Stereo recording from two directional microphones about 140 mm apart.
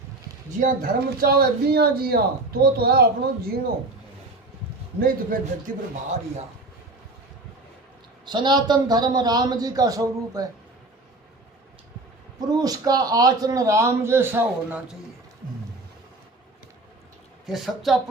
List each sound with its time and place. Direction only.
0.6 s speech: 85° right
4.9 s a man's voice: 90° right; by 6.4 s 65° right (ahead or behind)
8.2 s a man's voice: 35° right (ahead or behind)
12.5 s a man's voice: 25° right (ahead or behind)
17.4 s speech: centre (ahead or behind)